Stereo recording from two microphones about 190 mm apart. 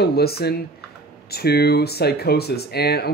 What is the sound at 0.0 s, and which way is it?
Speech, 55° left (ahead or behind).